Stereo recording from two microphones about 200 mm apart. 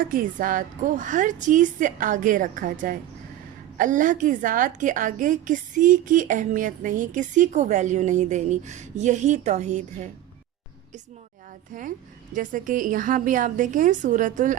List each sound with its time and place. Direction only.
0.0 s a woman's voice: 45° right (ahead or behind)
11.7 s a woman's voice: 40° right (ahead or behind)